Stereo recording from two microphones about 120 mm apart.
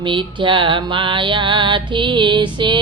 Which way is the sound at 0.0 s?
45° right (ahead or behind).